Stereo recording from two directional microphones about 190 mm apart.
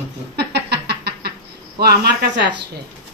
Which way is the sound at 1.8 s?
60° right (ahead or behind).